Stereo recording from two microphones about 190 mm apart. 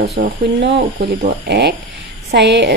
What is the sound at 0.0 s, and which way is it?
Speech, 60° right (ahead or behind).